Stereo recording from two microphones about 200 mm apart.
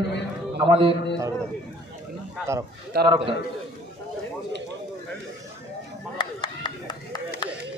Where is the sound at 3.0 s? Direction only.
25° right (ahead or behind).